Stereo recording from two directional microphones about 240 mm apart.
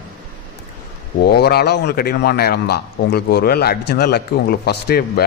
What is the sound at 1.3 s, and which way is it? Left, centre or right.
A man's voice, left.